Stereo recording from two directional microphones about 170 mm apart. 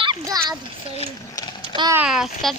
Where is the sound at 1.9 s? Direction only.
5° right (ahead or behind).